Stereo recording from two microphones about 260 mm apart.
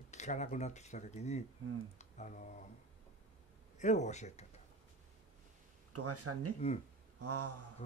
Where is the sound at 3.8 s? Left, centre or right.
Left.